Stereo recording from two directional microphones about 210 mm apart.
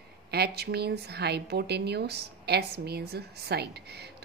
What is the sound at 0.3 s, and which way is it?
A woman's voice, 50° right (ahead or behind).